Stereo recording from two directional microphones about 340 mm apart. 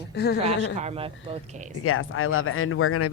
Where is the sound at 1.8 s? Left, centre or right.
Left.